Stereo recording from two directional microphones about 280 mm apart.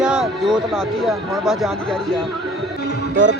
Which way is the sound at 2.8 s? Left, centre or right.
Left.